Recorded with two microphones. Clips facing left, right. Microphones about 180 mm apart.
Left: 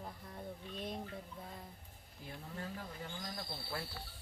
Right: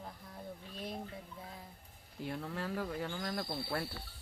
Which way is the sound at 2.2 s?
80° right.